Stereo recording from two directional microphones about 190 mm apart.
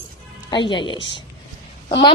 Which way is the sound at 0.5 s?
25° left (ahead or behind).